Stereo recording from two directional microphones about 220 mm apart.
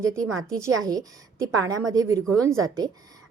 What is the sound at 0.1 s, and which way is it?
A woman's voice, 15° right (ahead or behind).